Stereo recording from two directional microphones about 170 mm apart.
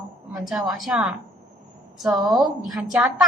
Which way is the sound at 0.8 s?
5° right (ahead or behind).